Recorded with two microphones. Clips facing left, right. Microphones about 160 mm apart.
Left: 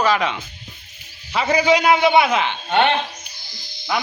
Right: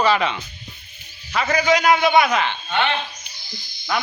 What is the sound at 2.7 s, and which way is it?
Speech, 55° left (ahead or behind).